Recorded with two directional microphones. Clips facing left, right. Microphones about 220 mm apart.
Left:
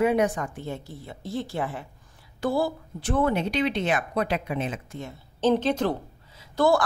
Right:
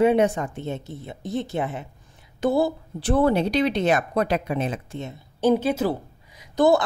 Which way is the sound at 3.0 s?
35° right (ahead or behind).